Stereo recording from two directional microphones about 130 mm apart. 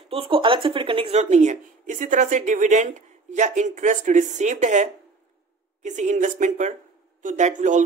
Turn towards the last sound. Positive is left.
turn(degrees=-70)  # may be behind; listen again after turning